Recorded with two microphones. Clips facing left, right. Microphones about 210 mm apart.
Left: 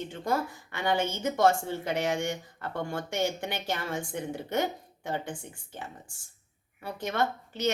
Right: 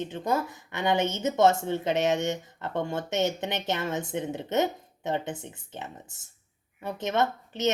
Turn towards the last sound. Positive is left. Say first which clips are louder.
# right 2 dB
turn(degrees=-20)  # may be behind; listen again after turning